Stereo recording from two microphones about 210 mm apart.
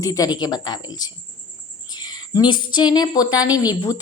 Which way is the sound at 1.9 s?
20° left (ahead or behind).